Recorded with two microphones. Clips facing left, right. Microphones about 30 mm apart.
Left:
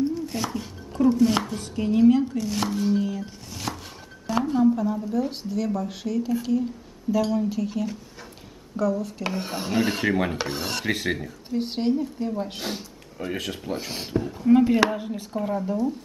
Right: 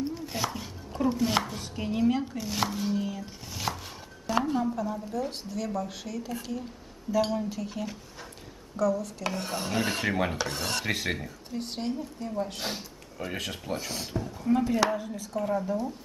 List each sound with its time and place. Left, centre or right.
0.0 s speech: centre
3.5 s chopping: centre
4.3 s a sound: centre
4.7 s speech: centre
7.3 s dishes: centre
8.7 s speech: centre
10.3 s speech: centre
10.6 s dishes: centre
11.5 s speech: left
12.5 s speech: centre
13.7 s speech: left
15.5 s dishes: centre